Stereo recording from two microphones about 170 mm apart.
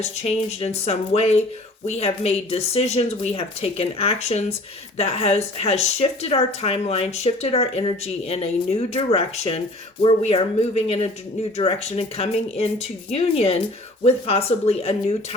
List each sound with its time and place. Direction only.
0.0 s speech: 35° left (ahead or behind)